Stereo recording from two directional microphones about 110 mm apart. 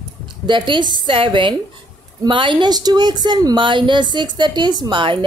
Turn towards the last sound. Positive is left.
turn(degrees=-50)  # may be behind; listen again after turning